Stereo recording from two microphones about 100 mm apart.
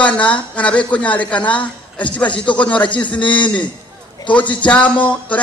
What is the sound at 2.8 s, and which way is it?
Speech, 50° left (ahead or behind).